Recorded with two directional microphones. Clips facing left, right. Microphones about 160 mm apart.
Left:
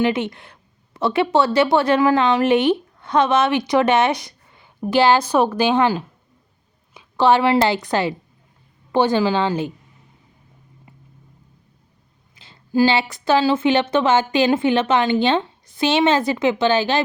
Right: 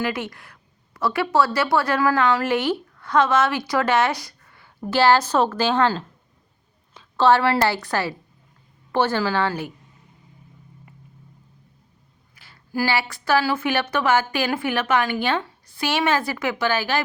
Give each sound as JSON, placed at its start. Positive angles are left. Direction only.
{"t": 0.0, "sound": "a woman's voice", "side_deg": 20}
{"t": 12.4, "sound": "speech", "side_deg": 20}